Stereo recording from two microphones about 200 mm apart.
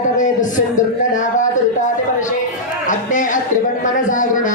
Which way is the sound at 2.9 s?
40° left (ahead or behind).